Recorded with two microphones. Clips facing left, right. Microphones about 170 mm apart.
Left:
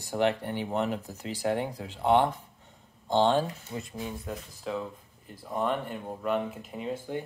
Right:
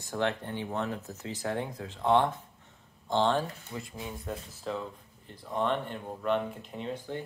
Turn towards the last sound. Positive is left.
turn(degrees=5)  # may be behind; listen again after turning